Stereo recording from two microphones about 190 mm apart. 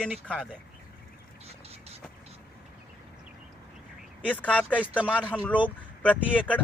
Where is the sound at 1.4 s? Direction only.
35° right (ahead or behind).